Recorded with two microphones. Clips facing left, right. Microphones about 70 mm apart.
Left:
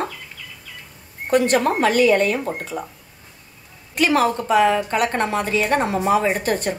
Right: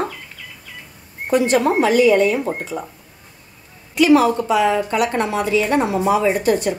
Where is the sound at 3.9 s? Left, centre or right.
Left.